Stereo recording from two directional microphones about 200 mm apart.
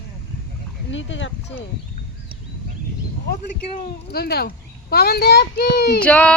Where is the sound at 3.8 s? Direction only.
50° left (ahead or behind).